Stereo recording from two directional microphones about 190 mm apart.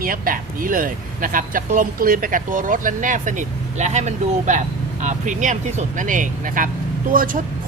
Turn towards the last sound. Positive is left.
turn(degrees=-45)  # may be behind; listen again after turning